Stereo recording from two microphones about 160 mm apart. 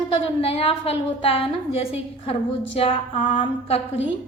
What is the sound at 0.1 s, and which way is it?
A woman's voice, 35° left (ahead or behind).